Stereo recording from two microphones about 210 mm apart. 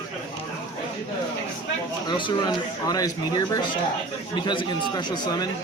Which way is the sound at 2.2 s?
20° left (ahead or behind).